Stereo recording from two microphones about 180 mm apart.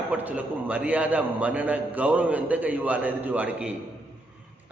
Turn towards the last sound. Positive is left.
turn(degrees=-10)  # may be behind; listen again after turning